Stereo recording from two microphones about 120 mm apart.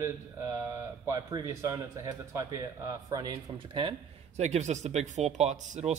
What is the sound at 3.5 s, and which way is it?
Speech, 45° right (ahead or behind).